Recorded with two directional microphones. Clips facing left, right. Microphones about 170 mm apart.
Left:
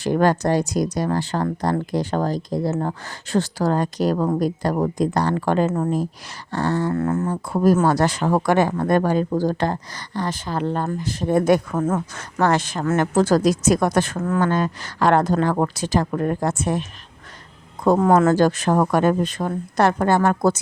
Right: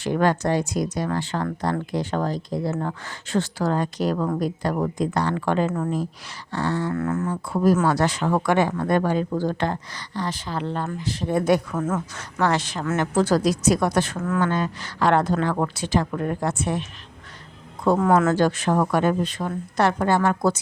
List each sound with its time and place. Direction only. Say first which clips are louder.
0.0 s a woman's voice: left 3 dB; 40° left (ahead or behind)
6.9 s speech: left 3 dB; 30° left (ahead or behind)
7.4 s speech: left 2 dB; 40° left (ahead or behind)
11.8 s a woman's voice: left 3 dB; 35° left (ahead or behind)
12.1 s a woman's voice: left 2 dB; 50° left (ahead or behind)
17.8 s speech: left 3 dB; 40° left (ahead or behind)